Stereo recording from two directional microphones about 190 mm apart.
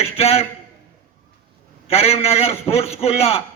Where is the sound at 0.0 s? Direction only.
30° left (ahead or behind).